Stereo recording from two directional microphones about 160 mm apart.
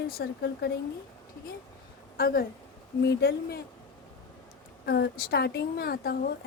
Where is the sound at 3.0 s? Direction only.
90° left.